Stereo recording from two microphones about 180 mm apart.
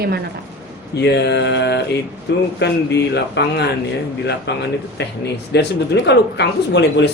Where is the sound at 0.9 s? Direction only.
65° left (ahead or behind).